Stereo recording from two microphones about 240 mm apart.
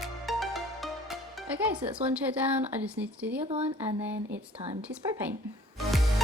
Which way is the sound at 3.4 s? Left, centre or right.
Right.